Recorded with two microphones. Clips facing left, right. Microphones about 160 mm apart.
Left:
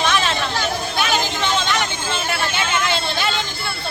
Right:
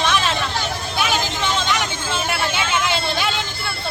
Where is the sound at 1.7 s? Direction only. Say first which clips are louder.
Even; 5° right (ahead or behind).